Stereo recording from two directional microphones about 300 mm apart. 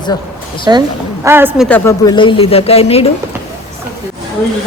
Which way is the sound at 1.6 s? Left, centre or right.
Centre.